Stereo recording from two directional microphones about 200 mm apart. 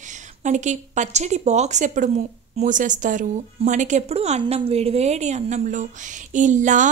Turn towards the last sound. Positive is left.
turn(degrees=-40)  # may be behind; listen again after turning